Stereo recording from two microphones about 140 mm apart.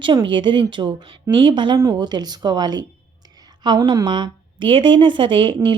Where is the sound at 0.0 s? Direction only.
35° right (ahead or behind).